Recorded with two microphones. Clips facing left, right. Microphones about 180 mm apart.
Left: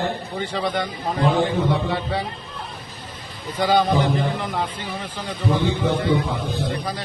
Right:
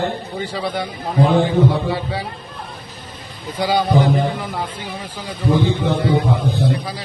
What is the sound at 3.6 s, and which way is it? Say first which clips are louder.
A man's voice: right 2 dB; 10° right (ahead or behind).